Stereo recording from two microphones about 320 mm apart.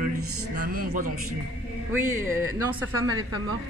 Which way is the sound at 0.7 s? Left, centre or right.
Right.